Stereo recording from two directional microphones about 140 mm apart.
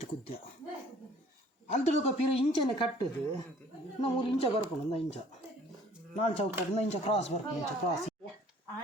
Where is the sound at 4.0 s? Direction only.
40° left (ahead or behind).